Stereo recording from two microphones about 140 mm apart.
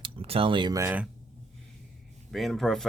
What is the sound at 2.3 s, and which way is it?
Speech, centre (ahead or behind).